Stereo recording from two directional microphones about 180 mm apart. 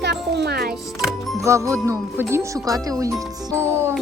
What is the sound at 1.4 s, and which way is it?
Speech, 15° right (ahead or behind).